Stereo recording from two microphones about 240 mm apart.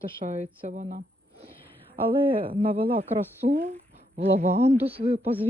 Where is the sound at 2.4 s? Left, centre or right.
Right.